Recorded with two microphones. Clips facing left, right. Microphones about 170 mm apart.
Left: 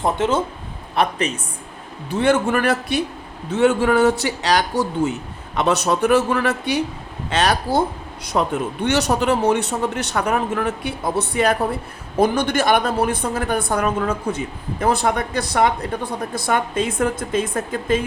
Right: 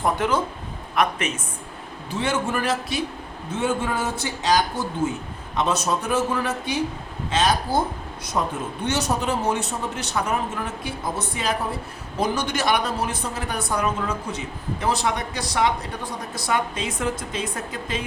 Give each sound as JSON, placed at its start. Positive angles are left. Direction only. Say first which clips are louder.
{"t": 0.0, "sound": "a man's voice", "louder": "left 3 dB", "side_deg": 25}
{"t": 2.1, "sound": "a woman's voice", "louder": "left 7 dB", "side_deg": 55}